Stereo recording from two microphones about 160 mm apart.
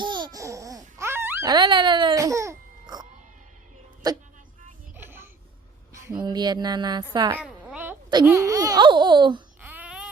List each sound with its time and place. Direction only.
0.0 s babbling: 30° right (ahead or behind)
1.5 s music: 30° right (ahead or behind)
4.0 s speech: 25° right (ahead or behind)
4.9 s a sound: 15° right (ahead or behind)
6.1 s speech: 25° right (ahead or behind)
7.3 s a sound: 10° right (ahead or behind)
8.2 s speech: 15° right (ahead or behind)
9.6 s babbling: 10° right (ahead or behind)